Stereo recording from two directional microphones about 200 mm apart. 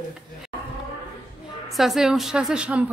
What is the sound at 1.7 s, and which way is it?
A woman's voice, centre (ahead or behind).